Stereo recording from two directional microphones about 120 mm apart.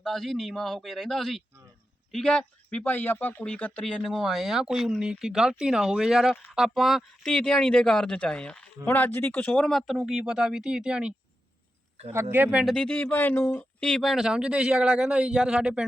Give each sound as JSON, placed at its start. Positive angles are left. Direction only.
{"t": 0.0, "sound": "speech", "side_deg": 0}
{"t": 12.1, "sound": "speech", "side_deg": -20}
{"t": 12.6, "sound": "speech", "side_deg": 10}
{"t": 13.7, "sound": "speech", "side_deg": 5}